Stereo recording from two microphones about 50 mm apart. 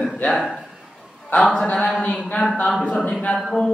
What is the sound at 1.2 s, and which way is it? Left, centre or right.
Speech, left.